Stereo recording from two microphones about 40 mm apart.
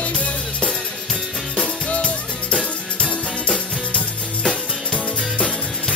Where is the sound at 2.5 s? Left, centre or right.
Left.